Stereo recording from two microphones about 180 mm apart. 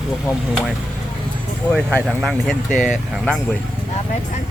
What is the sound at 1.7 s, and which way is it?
Speech, 5° left (ahead or behind).